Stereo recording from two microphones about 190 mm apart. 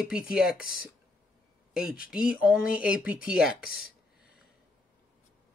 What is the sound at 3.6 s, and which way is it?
Speech, 50° left (ahead or behind).